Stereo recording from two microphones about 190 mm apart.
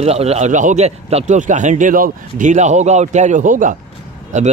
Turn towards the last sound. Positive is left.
turn(degrees=-40)  # may be behind; listen again after turning